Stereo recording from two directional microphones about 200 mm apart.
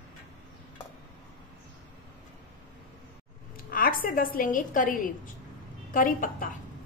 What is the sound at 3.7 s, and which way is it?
A woman's voice, 45° left (ahead or behind).